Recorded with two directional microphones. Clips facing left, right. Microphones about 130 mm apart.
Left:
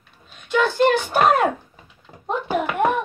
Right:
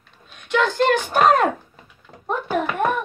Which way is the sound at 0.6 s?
10° left (ahead or behind).